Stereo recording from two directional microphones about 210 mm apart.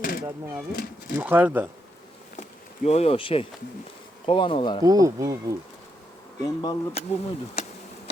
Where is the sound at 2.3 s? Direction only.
35° left (ahead or behind).